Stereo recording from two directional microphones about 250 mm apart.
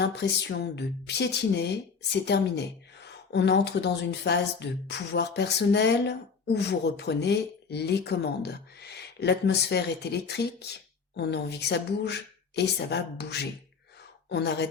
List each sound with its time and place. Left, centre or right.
0.0 s speech: left